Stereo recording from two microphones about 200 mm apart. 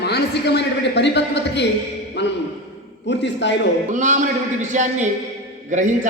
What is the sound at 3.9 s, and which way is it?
A man's voice, 35° right (ahead or behind).